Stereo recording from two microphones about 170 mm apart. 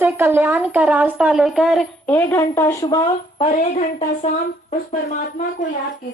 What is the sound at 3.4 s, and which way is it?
Speech, 50° left (ahead or behind).